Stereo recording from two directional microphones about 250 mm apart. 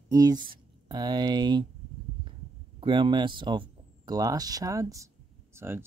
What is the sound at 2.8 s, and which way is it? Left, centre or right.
Speech, centre.